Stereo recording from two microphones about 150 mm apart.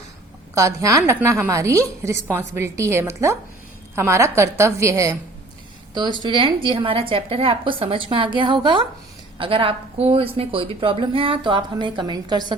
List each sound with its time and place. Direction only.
0.5 s a woman's voice: 20° right (ahead or behind)